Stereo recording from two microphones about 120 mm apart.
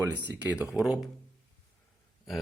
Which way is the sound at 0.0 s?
15° right (ahead or behind).